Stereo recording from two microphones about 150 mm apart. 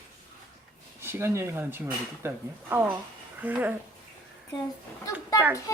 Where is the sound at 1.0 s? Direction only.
15° right (ahead or behind).